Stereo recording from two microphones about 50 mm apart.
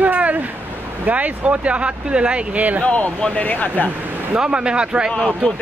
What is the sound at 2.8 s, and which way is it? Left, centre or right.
Speech, centre.